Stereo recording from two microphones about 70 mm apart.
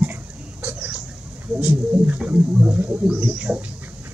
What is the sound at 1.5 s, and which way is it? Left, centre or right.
Speech, right.